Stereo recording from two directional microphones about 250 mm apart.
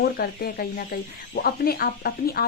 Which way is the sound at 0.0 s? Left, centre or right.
Left.